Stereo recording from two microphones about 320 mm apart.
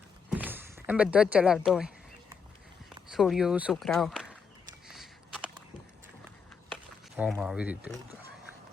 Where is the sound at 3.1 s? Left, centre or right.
Centre.